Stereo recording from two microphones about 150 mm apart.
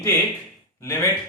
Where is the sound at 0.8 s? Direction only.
15° left (ahead or behind).